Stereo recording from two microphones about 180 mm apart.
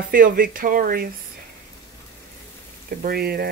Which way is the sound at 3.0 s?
55° right (ahead or behind).